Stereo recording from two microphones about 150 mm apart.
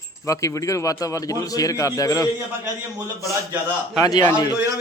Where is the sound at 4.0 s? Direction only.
25° left (ahead or behind).